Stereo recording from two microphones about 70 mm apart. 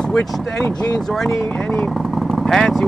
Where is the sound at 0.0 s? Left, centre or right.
Centre.